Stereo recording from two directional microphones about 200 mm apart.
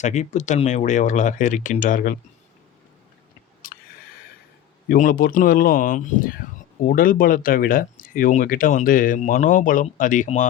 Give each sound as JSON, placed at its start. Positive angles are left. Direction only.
{"t": 0.0, "sound": "speech", "side_deg": 35}
{"t": 3.6, "sound": "a sound", "side_deg": 45}
{"t": 4.9, "sound": "speech", "side_deg": 45}